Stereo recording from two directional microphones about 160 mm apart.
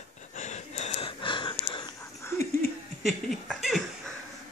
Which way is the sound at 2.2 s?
15° left (ahead or behind).